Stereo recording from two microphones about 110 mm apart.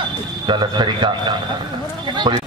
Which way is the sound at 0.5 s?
45° right (ahead or behind).